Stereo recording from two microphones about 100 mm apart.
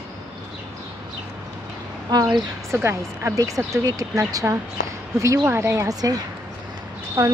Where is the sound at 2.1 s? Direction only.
45° right (ahead or behind).